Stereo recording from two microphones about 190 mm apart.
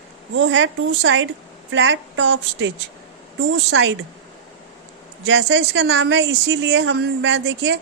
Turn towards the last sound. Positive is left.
turn(degrees=-70)  # may be behind; listen again after turning